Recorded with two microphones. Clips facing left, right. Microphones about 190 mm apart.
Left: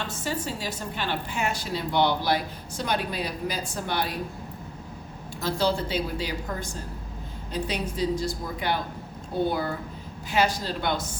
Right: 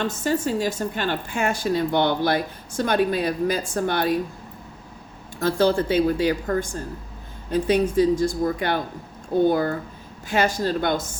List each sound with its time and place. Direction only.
0.3 s speech: 50° right (ahead or behind)
5.4 s speech: 55° right (ahead or behind)